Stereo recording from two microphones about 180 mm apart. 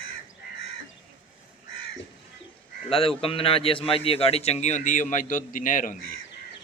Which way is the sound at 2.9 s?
30° left (ahead or behind).